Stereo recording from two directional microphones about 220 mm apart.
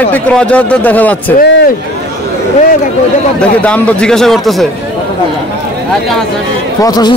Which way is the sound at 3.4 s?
5° left (ahead or behind).